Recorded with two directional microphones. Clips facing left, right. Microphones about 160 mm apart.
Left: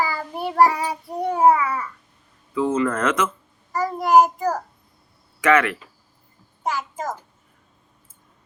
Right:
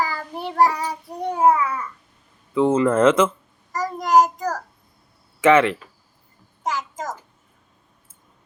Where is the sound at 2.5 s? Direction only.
25° right (ahead or behind).